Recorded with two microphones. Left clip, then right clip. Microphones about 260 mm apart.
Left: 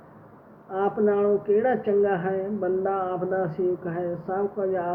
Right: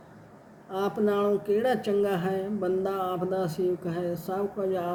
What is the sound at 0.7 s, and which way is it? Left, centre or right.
Speech, right.